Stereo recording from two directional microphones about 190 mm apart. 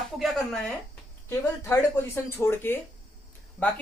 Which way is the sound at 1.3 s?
15° left (ahead or behind).